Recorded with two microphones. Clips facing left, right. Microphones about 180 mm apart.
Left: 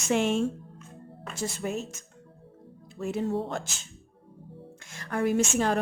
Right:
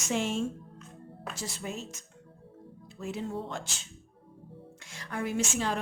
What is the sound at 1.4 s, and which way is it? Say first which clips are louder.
Speech: left 8 dB; 50° left (ahead or behind).